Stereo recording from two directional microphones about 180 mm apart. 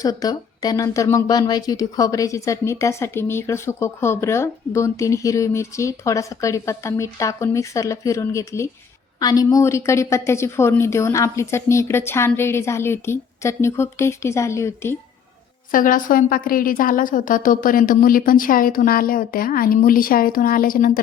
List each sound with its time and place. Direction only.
0.0 s speech: 20° left (ahead or behind)
15.7 s a woman's voice: 50° left (ahead or behind)